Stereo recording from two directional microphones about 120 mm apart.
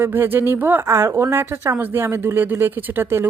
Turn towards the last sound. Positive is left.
turn(degrees=-20)  # may be behind; listen again after turning